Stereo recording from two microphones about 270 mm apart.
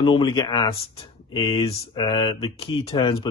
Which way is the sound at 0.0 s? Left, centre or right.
Centre.